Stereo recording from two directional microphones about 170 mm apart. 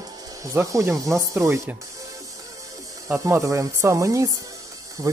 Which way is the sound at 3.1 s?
15° right (ahead or behind).